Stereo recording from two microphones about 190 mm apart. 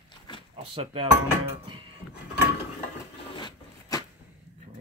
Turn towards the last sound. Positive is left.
turn(degrees=25)  # may be behind; listen again after turning